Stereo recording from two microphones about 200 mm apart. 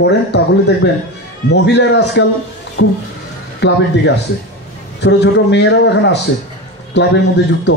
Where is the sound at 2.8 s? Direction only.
90° left.